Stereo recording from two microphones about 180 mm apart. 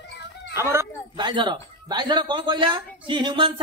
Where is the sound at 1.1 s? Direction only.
25° right (ahead or behind).